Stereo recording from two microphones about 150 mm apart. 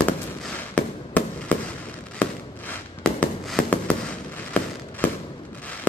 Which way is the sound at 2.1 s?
10° left (ahead or behind).